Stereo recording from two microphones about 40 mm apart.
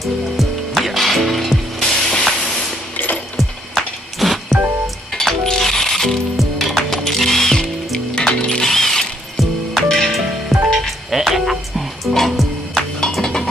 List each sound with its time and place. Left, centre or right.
0.0 s music: centre
1.8 s music: centre
2.4 s a sound: centre
3.3 s music: centre
5.1 s coin: centre
6.3 s music: centre
8.5 s ratchet: centre
9.4 s music: centre
9.8 s music: centre
12.1 s music: centre
13.2 s a sound: centre